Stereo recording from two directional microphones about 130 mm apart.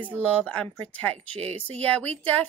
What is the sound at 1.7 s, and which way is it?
Speech, 10° left (ahead or behind).